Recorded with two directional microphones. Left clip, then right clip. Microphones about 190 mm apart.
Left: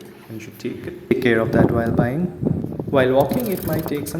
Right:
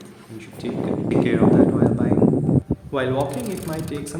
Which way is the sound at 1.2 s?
30° left (ahead or behind).